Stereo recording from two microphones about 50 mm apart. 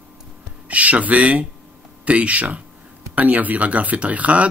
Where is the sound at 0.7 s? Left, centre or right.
Right.